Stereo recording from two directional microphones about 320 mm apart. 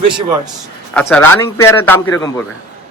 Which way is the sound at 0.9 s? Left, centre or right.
Centre.